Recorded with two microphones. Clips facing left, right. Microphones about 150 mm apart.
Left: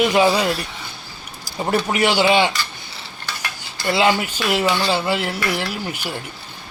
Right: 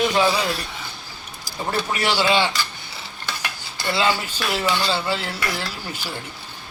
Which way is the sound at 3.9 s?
15° left (ahead or behind).